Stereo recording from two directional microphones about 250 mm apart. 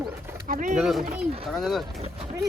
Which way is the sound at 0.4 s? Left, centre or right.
Right.